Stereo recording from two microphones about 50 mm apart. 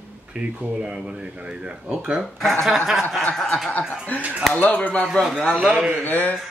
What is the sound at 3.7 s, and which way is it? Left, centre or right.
Speech, left.